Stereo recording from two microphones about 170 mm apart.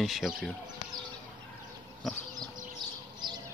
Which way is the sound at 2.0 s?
Centre (ahead or behind).